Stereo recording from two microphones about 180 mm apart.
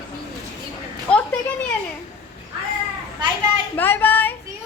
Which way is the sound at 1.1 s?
5° left (ahead or behind).